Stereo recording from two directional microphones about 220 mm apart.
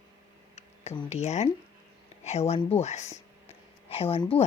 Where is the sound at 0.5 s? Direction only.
30° left (ahead or behind).